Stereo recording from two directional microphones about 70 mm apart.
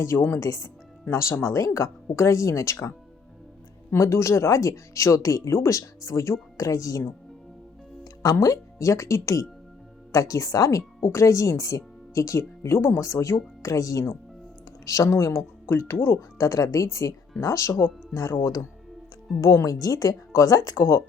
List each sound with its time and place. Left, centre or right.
0.0 s speech: left
0.3 s a woman's voice: left
1.1 s speech: left
3.9 s a woman's voice: left
8.0 s a woman's voice: left
11.0 s a woman's voice: left
16.4 s a woman's voice: left
19.4 s a woman's voice: left
20.7 s speech: left